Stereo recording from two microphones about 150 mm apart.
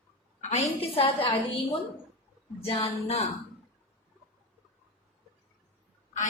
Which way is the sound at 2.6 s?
40° left (ahead or behind).